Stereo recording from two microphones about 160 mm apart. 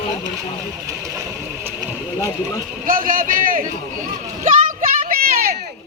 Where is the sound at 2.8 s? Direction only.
60° right (ahead or behind).